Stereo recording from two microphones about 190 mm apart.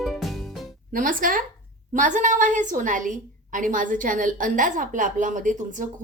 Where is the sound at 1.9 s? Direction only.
40° right (ahead or behind).